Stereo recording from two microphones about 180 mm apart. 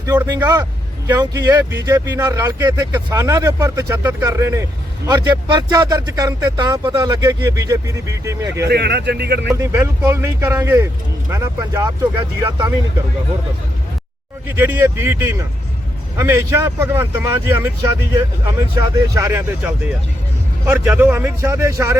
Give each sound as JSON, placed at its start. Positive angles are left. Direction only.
{"t": 0.0, "sound": "speech", "side_deg": -20}
{"t": 8.6, "sound": "speech", "side_deg": -65}
{"t": 9.6, "sound": "speech", "side_deg": -15}
{"t": 14.4, "sound": "speech", "side_deg": -10}
{"t": 18.9, "sound": "speech", "side_deg": -15}